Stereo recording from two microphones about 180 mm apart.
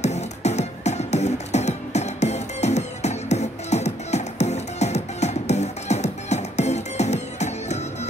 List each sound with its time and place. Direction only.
0.0 s music: 40° left (ahead or behind)